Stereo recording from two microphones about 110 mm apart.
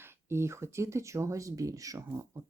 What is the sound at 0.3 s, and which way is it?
Speech, 25° right (ahead or behind).